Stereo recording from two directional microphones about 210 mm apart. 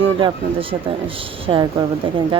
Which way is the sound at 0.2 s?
25° right (ahead or behind).